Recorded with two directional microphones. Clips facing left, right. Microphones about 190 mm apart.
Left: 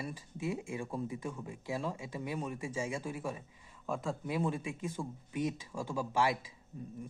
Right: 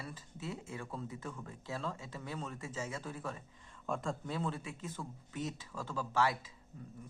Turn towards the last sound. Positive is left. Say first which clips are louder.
# left 6 dB
turn(degrees=15)  # may be behind; listen again after turning